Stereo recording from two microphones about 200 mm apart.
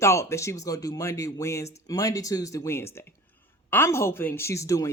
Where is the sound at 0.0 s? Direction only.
15° left (ahead or behind).